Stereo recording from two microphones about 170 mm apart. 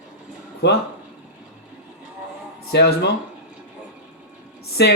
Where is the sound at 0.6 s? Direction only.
80° left.